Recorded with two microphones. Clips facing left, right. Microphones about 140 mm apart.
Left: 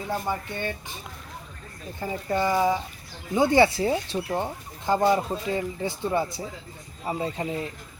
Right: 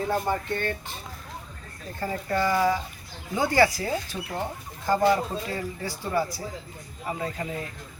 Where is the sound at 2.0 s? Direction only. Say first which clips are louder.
Even; 15° left (ahead or behind).